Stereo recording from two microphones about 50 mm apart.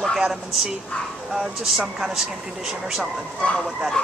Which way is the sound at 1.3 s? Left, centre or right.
Centre.